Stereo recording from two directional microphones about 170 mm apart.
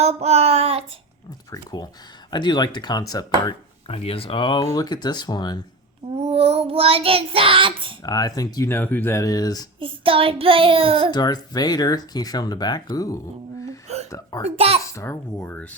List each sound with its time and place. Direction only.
0.0 s child singing: 40° right (ahead or behind)
1.5 s speech: 20° left (ahead or behind)
3.8 s speech: 35° left (ahead or behind)
6.1 s child singing: 35° right (ahead or behind)
8.0 s speech: 20° left (ahead or behind)
9.8 s child singing: 30° right (ahead or behind)
11.1 s speech: 25° left (ahead or behind)
13.8 s hiccup: 40° right (ahead or behind)
14.1 s a child's voice: 20° left (ahead or behind)
14.4 s child singing: 35° right (ahead or behind)
14.8 s a child's voice: 15° left (ahead or behind)